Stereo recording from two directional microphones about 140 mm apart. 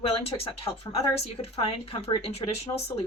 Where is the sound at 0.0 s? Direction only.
45° left (ahead or behind).